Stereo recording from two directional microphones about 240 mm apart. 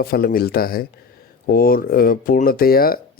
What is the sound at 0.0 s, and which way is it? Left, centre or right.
Speech, left.